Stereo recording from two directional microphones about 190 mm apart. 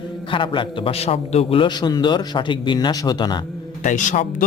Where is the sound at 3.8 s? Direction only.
40° left (ahead or behind).